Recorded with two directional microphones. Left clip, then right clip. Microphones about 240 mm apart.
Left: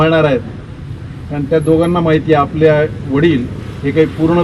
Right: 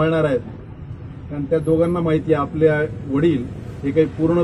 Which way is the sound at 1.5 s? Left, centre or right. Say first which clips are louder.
Left 6 dB; centre.